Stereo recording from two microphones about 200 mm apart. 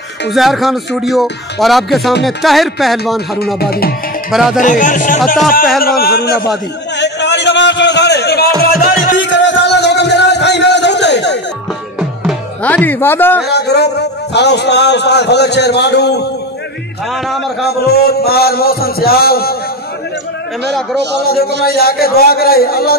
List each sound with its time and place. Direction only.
0.3 s speech: centre (ahead or behind)
3.5 s speech: 50° left (ahead or behind)
4.3 s speech: centre (ahead or behind)
4.6 s speech: 40° left (ahead or behind)
7.0 s music: 60° left (ahead or behind)
9.2 s music: 65° left (ahead or behind)
12.6 s speech: 10° left (ahead or behind)
13.5 s a man's voice: 55° left (ahead or behind)
17.6 s speech: 50° left (ahead or behind)
21.6 s speech: 50° left (ahead or behind)